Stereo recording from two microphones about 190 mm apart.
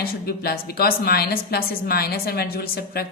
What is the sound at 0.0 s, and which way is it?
A woman's voice, 50° left (ahead or behind).